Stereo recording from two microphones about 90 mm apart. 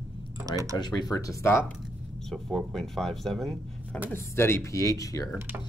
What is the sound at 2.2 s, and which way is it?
Speech, 5° left (ahead or behind).